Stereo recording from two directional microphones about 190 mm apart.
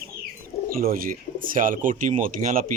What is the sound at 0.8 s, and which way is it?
Speech, 50° right (ahead or behind).